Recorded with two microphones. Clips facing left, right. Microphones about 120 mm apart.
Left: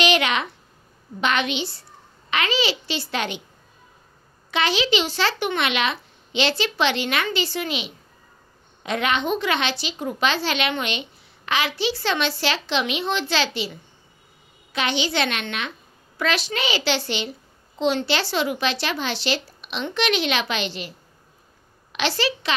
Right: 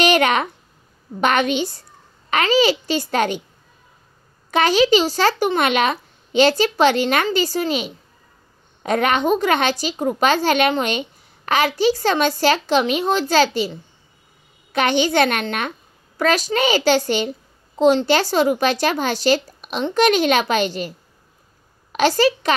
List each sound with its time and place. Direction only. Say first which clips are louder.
0.0 s a sound: right 5 dB; 45° right (ahead or behind)
1.2 s a child's voice: right 5 dB; 45° right (ahead or behind)
4.5 s a woman's voice: right 7 dB; 45° right (ahead or behind)
21.9 s a child's voice: right 8 dB; 45° right (ahead or behind)